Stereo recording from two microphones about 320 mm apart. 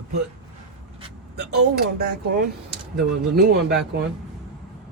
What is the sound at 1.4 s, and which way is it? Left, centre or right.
Speech, right.